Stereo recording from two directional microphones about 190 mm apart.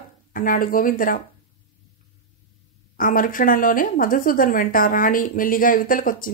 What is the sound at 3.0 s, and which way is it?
A woman's voice, 45° left (ahead or behind).